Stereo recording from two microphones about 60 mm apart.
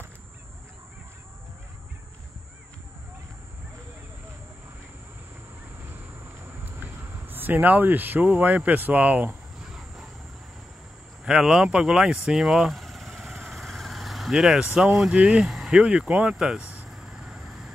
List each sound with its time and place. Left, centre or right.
6.6 s speech: right
9.6 s train: centre
11.2 s vehicle: centre
14.6 s speech: centre
15.4 s speech: centre
16.9 s vehicle: centre